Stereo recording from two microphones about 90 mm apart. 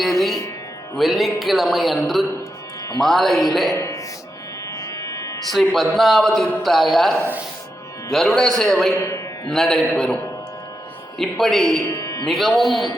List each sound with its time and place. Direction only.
0.0 s music: centre (ahead or behind)
0.9 s a man's voice: centre (ahead or behind)
3.8 s music: 35° left (ahead or behind)
5.5 s a man's voice: centre (ahead or behind)
9.0 s a man's voice: 35° left (ahead or behind)
9.5 s a man's voice: 5° left (ahead or behind)
11.2 s a man's voice: centre (ahead or behind)
11.9 s music: 40° left (ahead or behind)
12.2 s a man's voice: centre (ahead or behind)